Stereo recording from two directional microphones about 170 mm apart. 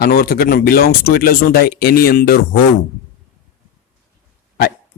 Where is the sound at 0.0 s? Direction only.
65° left (ahead or behind).